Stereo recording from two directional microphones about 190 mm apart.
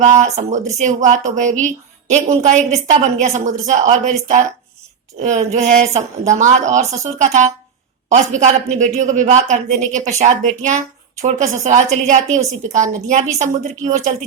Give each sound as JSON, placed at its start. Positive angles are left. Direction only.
{"t": 0.0, "sound": "a woman's voice", "side_deg": -40}